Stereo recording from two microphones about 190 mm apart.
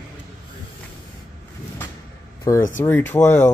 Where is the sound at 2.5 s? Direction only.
45° left (ahead or behind).